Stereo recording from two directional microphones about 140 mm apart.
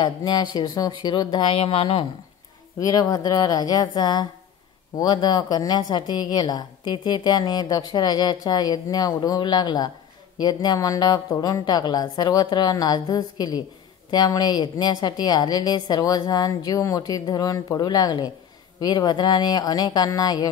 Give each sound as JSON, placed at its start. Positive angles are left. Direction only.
{"t": 0.0, "sound": "speech", "side_deg": 30}
{"t": 2.8, "sound": "a woman's voice", "side_deg": 25}